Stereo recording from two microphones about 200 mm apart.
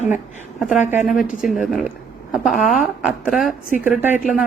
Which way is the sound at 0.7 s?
35° left (ahead or behind).